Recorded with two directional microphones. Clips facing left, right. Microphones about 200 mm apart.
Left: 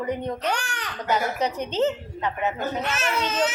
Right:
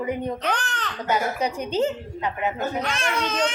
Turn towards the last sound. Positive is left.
turn(degrees=5)  # may be behind; listen again after turning